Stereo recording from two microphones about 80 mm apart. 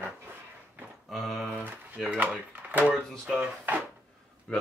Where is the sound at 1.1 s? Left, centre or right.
Centre.